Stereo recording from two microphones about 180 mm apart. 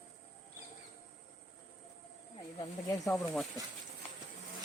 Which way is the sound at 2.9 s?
20° left (ahead or behind).